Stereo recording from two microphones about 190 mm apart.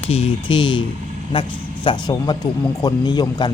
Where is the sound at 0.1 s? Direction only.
30° left (ahead or behind).